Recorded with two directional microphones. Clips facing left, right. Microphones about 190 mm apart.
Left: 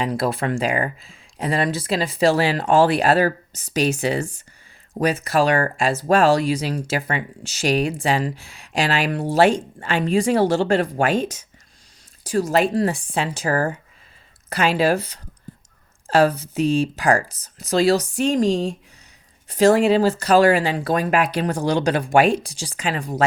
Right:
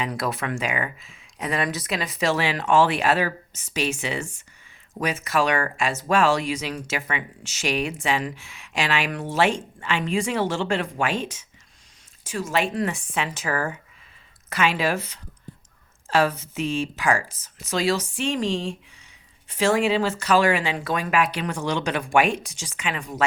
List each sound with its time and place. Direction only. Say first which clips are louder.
0.0 s speech: left 5 dB; 30° left (ahead or behind)